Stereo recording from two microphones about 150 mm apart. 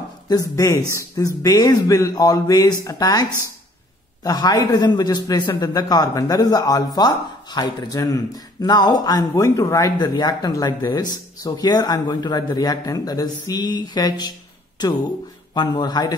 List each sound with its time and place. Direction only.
0.3 s a man's voice: 20° left (ahead or behind)
15.5 s a man's voice: 30° left (ahead or behind)